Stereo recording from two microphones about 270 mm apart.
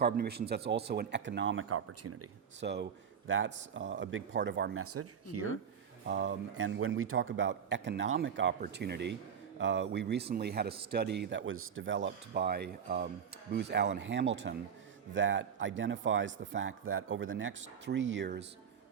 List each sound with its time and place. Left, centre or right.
0.0 s speech: right
2.6 s a man's voice: right
6.1 s a man's voice: right